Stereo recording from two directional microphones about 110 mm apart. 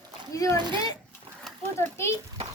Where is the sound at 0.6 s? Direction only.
45° right (ahead or behind).